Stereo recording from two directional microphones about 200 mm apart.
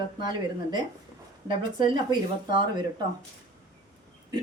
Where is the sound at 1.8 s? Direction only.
25° right (ahead or behind).